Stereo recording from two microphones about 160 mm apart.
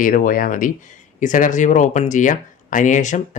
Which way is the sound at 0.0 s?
55° left (ahead or behind).